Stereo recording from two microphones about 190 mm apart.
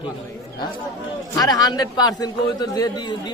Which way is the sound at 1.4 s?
20° left (ahead or behind).